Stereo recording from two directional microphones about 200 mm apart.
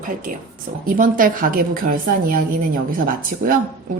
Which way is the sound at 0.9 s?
45° right (ahead or behind).